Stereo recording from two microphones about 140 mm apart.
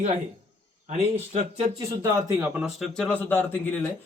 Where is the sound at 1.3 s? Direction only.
50° right (ahead or behind).